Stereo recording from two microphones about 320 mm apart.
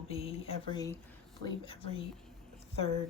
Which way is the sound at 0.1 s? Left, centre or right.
Centre.